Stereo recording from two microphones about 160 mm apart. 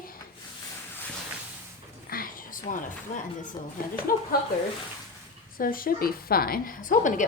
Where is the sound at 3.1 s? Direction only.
50° left (ahead or behind).